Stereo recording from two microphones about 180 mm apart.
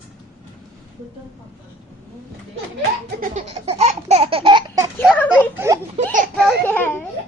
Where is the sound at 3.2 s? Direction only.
40° right (ahead or behind); by 4.8 s 25° right (ahead or behind).